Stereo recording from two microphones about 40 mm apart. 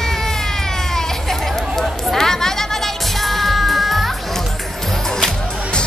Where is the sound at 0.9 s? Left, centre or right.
Centre.